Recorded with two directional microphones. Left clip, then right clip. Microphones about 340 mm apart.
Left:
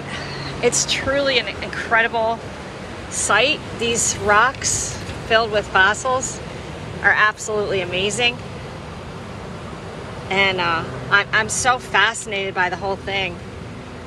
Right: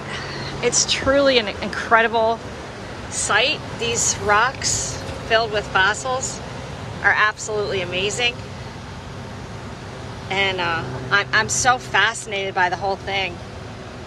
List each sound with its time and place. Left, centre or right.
0.1 s a woman's voice: centre
10.3 s speech: centre